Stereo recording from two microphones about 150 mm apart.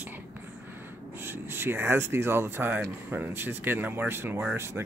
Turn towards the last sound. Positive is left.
turn(degrees=-15)  # may be behind; listen again after turning